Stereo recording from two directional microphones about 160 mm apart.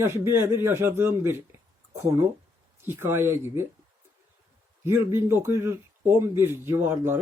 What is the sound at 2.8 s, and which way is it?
Speech, 15° right (ahead or behind).